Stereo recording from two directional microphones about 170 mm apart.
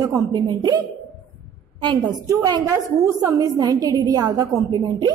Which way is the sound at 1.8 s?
25° right (ahead or behind).